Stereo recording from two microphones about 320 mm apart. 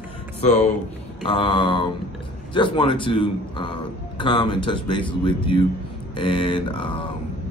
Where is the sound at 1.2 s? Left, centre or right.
Centre.